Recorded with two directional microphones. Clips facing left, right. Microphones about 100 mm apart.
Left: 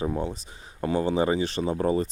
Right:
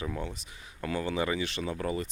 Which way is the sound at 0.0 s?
30° left (ahead or behind).